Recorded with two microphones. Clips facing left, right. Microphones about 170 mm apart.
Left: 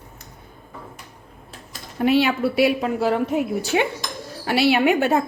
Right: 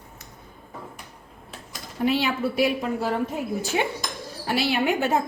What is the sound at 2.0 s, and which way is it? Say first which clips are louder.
A woman's voice: left 5 dB; 65° left (ahead or behind).